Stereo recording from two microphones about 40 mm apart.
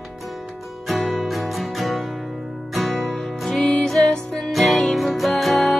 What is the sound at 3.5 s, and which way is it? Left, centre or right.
Music, left.